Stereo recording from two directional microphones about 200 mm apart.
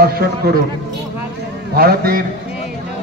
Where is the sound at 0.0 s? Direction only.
50° right (ahead or behind).